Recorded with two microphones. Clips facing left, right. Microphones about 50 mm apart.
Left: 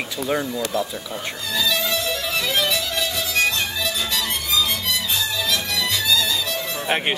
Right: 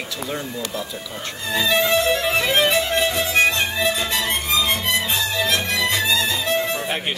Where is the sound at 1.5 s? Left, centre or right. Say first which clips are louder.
Right 5 dB; right.